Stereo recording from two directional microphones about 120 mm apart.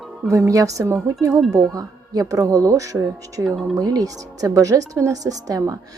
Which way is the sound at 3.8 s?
30° right (ahead or behind).